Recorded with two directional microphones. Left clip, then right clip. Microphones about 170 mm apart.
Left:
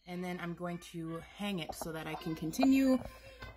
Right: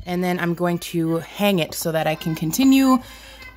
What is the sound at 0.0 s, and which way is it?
Speech, 70° right (ahead or behind).